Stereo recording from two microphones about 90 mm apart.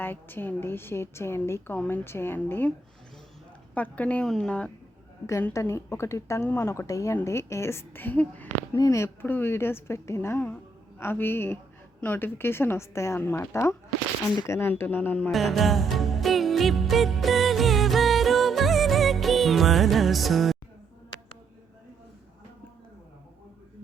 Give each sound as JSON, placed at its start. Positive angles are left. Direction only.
{"t": 0.0, "sound": "a woman's voice", "side_deg": 25}
{"t": 3.8, "sound": "a woman's voice", "side_deg": 15}
{"t": 5.2, "sound": "a woman's voice", "side_deg": 30}
{"t": 8.7, "sound": "speech", "side_deg": 35}
{"t": 9.2, "sound": "a woman's voice", "side_deg": 25}
{"t": 10.4, "sound": "a sound", "side_deg": 15}
{"t": 11.0, "sound": "a woman's voice", "side_deg": 25}
{"t": 15.3, "sound": "music", "side_deg": 0}